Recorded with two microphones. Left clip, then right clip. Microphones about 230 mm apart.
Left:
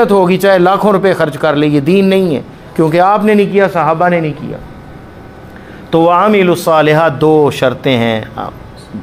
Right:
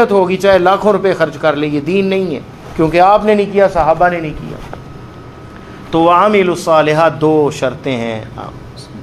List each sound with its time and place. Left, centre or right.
0.0 s speech: left
5.9 s speech: left